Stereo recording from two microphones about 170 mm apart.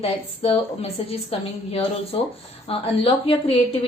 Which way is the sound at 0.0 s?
35° left (ahead or behind).